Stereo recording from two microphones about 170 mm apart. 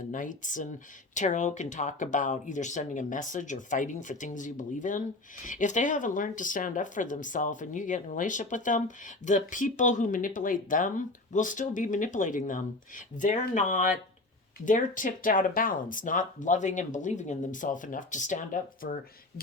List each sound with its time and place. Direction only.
0.1 s speech: 50° left (ahead or behind)